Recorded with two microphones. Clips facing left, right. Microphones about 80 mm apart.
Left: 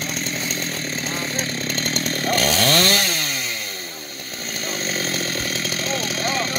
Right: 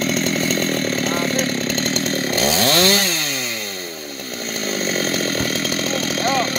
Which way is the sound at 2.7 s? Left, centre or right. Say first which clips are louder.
Right 3 dB; right.